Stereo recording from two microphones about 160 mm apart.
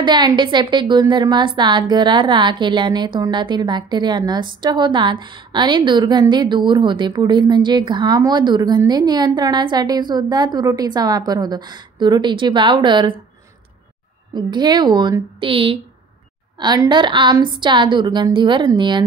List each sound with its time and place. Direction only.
0.0 s a woman's voice: 25° right (ahead or behind)
14.3 s a woman's voice: 25° right (ahead or behind)